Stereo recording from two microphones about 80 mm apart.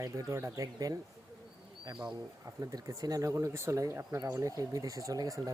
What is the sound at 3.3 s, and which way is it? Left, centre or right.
Speech, right.